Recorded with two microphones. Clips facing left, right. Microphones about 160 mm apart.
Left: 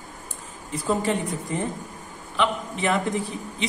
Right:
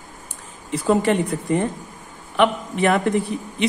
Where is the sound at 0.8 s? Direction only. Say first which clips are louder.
Right 6 dB; 70° right (ahead or behind).